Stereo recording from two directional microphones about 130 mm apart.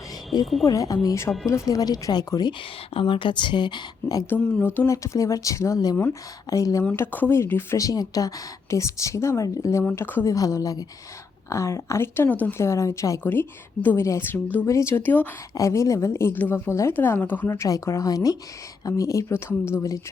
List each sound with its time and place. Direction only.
0.6 s speech: 25° left (ahead or behind)
4.3 s speech: 15° left (ahead or behind)
4.9 s speech: 25° left (ahead or behind)
6.8 s speech: 15° left (ahead or behind)